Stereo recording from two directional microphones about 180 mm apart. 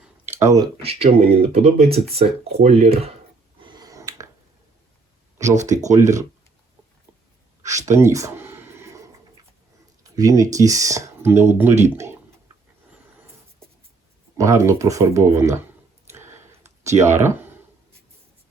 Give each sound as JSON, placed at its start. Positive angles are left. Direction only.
{"t": 0.3, "sound": "speech", "side_deg": -20}
{"t": 0.8, "sound": "speech", "side_deg": -35}
{"t": 3.6, "sound": "finger snapping", "side_deg": -25}
{"t": 5.6, "sound": "speech", "side_deg": -20}
{"t": 7.9, "sound": "a sound", "side_deg": -15}
{"t": 10.0, "sound": "speech", "side_deg": -20}
{"t": 14.3, "sound": "speech", "side_deg": -15}
{"t": 16.0, "sound": "a sound", "side_deg": -15}
{"t": 17.0, "sound": "speech", "side_deg": -15}